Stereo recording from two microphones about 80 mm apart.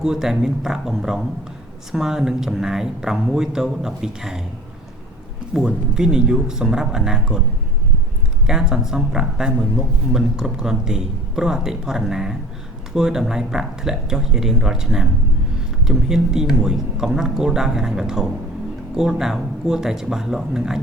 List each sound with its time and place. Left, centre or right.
0.0 s speech: centre
5.5 s speech: centre
8.4 s speech: centre